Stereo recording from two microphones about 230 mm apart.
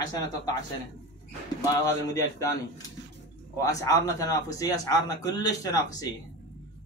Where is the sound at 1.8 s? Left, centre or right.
Centre.